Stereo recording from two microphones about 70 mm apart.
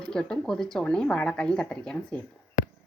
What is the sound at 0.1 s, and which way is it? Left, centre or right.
Speech, centre.